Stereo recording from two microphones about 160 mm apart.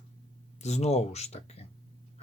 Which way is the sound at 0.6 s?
45° left (ahead or behind).